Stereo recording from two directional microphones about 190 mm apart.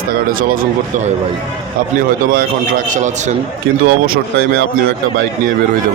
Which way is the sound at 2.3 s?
50° right (ahead or behind).